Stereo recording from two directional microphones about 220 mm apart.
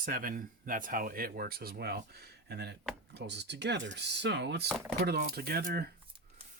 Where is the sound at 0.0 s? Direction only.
40° right (ahead or behind).